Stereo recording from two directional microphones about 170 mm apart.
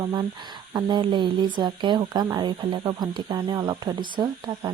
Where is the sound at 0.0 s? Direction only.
25° right (ahead or behind).